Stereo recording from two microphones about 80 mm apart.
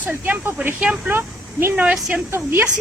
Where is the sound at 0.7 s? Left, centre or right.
Centre.